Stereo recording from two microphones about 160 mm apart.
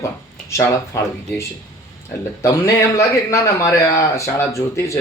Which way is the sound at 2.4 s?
20° left (ahead or behind).